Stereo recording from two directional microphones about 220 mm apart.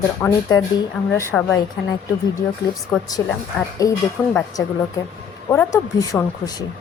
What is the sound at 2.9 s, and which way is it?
Speech, 5° left (ahead or behind).